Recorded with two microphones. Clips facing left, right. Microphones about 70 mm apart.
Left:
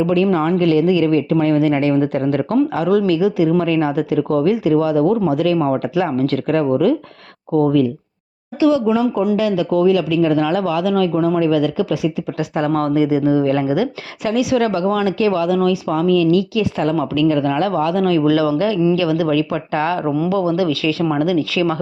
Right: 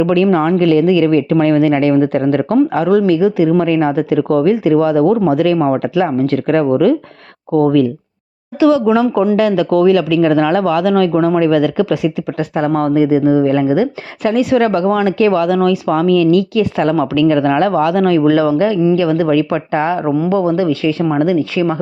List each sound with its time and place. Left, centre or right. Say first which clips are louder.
0.0 s speech: right 3 dB; right
0.3 s speech: right 4 dB; right
4.1 s speech: right 4 dB; right
5.5 s speech: right 3 dB; right
6.3 s speech: right 4 dB; right
7.5 s speech: right 3 dB; right
8.5 s speech: right 4 dB; right
9.3 s speech: right 4 dB; right
12.5 s speech: right 3 dB; right
14.2 s speech: right 4 dB; right
18.3 s speech: right 4 dB; right
19.7 s speech: right 3 dB; right
20.3 s speech: right 3 dB; right